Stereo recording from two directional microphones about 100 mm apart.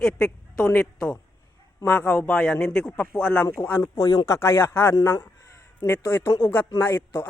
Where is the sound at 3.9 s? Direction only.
40° left (ahead or behind).